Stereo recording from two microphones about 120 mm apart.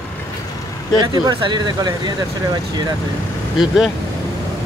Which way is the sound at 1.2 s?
35° right (ahead or behind).